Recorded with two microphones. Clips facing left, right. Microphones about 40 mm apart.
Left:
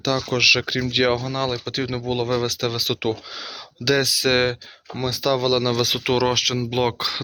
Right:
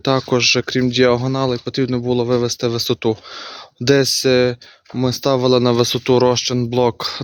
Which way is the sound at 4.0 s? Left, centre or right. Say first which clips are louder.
Right 5 dB; centre.